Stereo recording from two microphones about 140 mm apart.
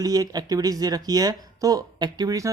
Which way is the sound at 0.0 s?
25° right (ahead or behind).